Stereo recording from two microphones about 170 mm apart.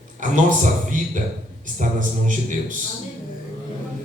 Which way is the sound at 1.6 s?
50° right (ahead or behind).